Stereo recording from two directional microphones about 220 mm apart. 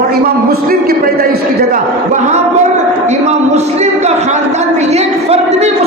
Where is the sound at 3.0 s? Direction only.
30° right (ahead or behind).